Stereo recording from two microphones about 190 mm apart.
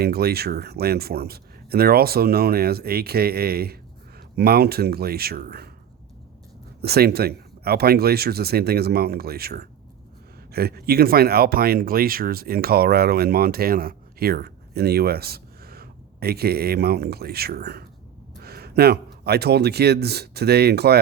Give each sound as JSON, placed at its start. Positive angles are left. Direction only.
{"t": 0.0, "sound": "speech", "side_deg": -55}
{"t": 6.8, "sound": "a man's voice", "side_deg": -55}